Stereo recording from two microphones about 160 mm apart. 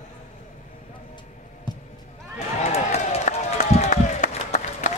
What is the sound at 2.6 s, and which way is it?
Run, 45° left (ahead or behind).